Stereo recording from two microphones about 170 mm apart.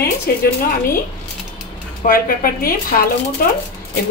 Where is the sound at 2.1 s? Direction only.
60° left (ahead or behind).